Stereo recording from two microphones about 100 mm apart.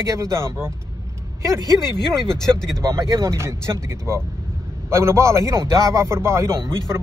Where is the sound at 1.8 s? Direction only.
45° left (ahead or behind).